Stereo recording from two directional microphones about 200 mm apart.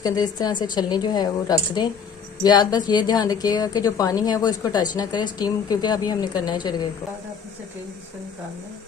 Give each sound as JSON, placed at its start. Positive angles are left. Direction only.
{"t": 0.0, "sound": "a woman's voice", "side_deg": 20}
{"t": 2.4, "sound": "a woman's voice", "side_deg": 20}